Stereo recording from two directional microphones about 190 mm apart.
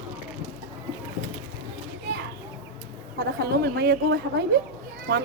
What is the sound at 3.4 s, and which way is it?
A woman's voice, 55° right (ahead or behind).